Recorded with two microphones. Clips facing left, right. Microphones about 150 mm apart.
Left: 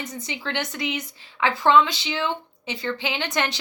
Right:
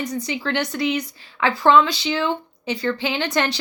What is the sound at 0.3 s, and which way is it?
Speech, 20° left (ahead or behind).